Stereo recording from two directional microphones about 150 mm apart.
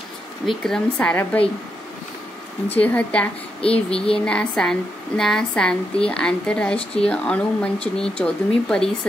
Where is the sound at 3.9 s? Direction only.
40° left (ahead or behind).